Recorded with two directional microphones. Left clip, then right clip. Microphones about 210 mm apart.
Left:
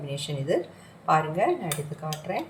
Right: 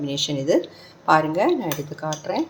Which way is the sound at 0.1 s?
40° right (ahead or behind).